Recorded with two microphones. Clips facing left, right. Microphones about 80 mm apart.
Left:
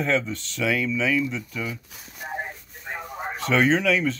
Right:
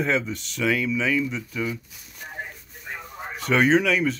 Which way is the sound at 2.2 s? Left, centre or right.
Left.